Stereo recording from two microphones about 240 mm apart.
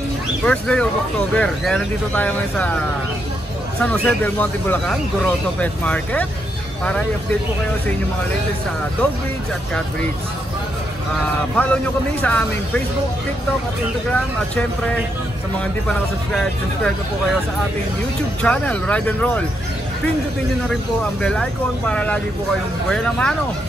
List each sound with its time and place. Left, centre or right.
0.5 s speech: centre
3.8 s speech: centre
11.5 s speech: centre
15.5 s speech: centre
18.4 s speech: centre
21.2 s speech: centre